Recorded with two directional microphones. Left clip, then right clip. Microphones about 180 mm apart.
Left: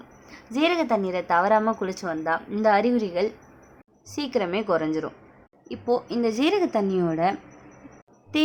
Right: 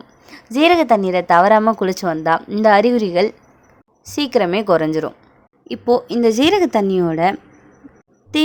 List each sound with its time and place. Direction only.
0.3 s a woman's voice: 40° right (ahead or behind)